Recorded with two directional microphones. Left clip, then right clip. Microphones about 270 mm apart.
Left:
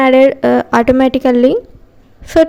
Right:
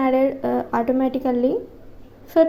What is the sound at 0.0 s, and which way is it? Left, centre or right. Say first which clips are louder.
A woman's voice: left 11 dB; left.